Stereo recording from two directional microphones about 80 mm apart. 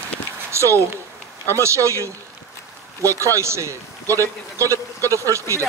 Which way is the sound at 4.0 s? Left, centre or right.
Left.